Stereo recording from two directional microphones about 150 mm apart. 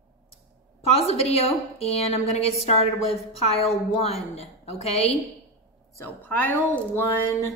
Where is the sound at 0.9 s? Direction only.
45° left (ahead or behind).